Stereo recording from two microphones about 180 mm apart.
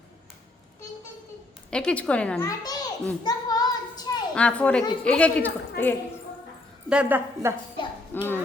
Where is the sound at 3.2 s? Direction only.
20° left (ahead or behind).